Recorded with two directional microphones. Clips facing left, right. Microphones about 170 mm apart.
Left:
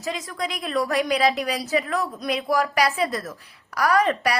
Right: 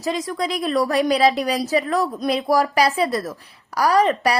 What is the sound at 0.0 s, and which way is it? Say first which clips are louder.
A woman's voice: right 5 dB; 35° right (ahead or behind).